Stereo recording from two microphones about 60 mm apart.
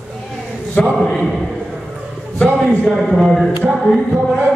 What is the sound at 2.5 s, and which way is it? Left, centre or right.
Speech, centre.